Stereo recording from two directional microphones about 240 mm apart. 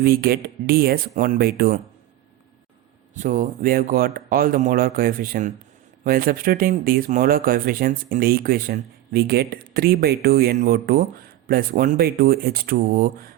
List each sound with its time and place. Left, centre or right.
0.0 s speech: right
3.2 s speech: right